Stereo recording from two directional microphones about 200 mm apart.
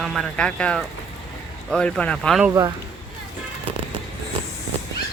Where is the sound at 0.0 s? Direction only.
Centre (ahead or behind).